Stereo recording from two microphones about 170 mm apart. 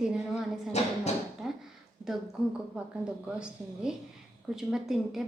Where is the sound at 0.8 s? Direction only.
40° left (ahead or behind).